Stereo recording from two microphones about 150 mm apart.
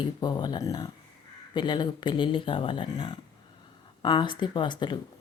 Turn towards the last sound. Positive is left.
turn(degrees=30)  # may be behind; listen again after turning